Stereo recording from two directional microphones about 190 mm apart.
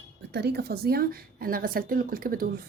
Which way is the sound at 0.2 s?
60° right (ahead or behind).